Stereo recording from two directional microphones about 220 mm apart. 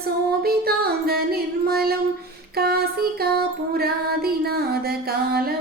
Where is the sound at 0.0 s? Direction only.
45° right (ahead or behind).